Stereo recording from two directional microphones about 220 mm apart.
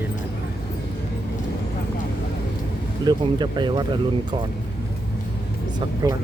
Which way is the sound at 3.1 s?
20° right (ahead or behind).